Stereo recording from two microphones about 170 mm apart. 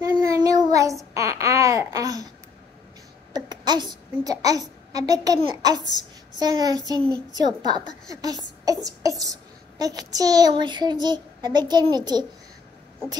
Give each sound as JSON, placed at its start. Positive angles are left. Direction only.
{"t": 0.0, "sound": "child singing", "side_deg": -20}
{"t": 1.1, "sound": "babbling", "side_deg": -20}
{"t": 3.3, "sound": "a child's voice", "side_deg": -25}